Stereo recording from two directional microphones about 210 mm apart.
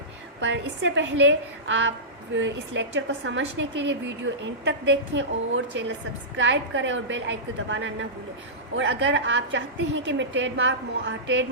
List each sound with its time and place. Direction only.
0.4 s a woman's voice: 60° right (ahead or behind)